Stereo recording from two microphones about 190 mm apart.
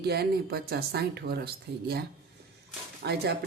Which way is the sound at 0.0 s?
55° right (ahead or behind).